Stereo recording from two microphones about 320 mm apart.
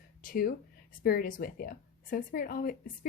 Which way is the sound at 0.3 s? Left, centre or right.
Left.